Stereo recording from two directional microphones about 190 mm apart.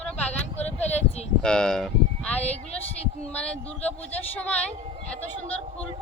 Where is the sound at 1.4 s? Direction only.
5° left (ahead or behind).